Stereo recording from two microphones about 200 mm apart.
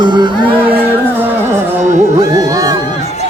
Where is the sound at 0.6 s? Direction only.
10° right (ahead or behind).